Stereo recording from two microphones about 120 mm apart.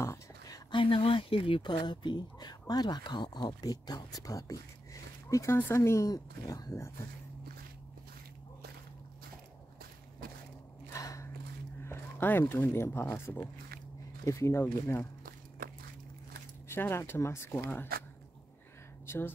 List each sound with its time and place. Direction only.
0.0 s a sound: 25° left (ahead or behind)
0.7 s speech: 45° left (ahead or behind); by 6.9 s 25° left (ahead or behind)
10.9 s a sound: 25° left (ahead or behind)
11.8 s speech: 20° left (ahead or behind)
16.6 s speech: 20° left (ahead or behind)
19.0 s speech: 20° left (ahead or behind)